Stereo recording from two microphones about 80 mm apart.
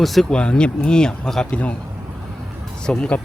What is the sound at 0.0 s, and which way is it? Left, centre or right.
Speech, centre.